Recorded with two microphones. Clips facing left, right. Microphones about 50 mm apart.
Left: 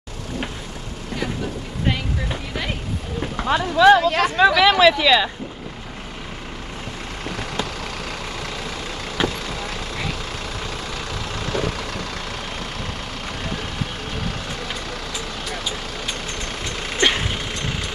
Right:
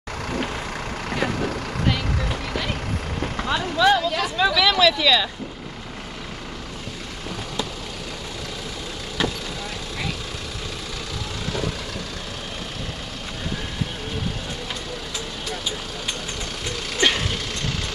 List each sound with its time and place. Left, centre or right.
1.1 s vehicle: right
3.4 s speech: left
9.2 s vehicle: left
17.0 s vehicle: left